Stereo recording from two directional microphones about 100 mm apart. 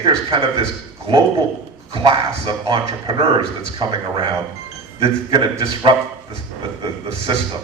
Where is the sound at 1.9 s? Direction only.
60° right (ahead or behind).